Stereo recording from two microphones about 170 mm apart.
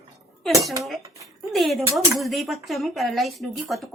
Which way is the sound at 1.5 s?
Centre (ahead or behind).